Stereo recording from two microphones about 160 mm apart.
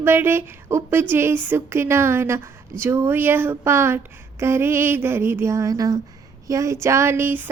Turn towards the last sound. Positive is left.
turn(degrees=-15)  # may be behind; listen again after turning